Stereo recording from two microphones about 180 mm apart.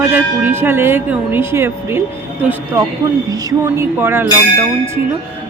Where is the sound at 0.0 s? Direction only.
10° right (ahead or behind).